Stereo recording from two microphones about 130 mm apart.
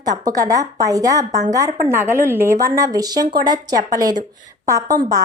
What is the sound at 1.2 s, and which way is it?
Speech, 70° right (ahead or behind).